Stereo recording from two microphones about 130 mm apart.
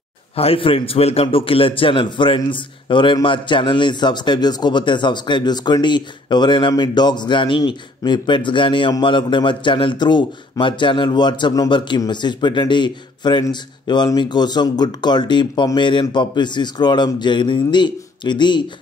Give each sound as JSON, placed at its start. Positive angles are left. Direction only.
{"t": 0.4, "sound": "a man's voice", "side_deg": 45}